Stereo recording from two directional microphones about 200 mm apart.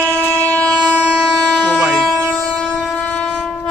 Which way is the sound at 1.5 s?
5° left (ahead or behind).